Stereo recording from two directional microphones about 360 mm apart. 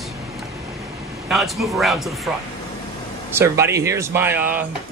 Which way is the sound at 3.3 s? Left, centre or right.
Centre.